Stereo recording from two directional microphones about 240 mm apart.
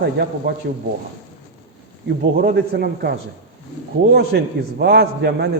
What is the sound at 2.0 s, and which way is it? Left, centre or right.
A man's voice, right.